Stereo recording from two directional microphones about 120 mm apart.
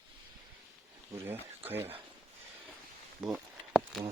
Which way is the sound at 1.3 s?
15° right (ahead or behind).